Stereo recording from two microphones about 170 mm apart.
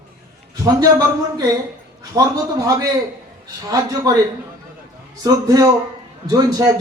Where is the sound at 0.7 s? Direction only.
20° right (ahead or behind).